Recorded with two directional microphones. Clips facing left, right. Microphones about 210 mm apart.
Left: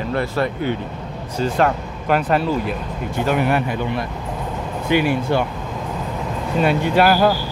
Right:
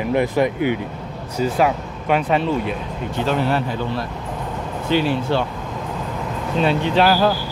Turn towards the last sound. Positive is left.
turn(degrees=10)  # may be behind; listen again after turning